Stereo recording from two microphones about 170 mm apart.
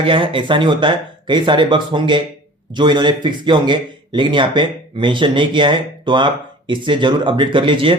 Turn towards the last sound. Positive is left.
turn(degrees=-30)  # may be behind; listen again after turning